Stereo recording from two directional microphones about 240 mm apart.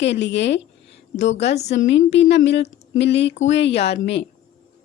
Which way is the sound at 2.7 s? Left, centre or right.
Left.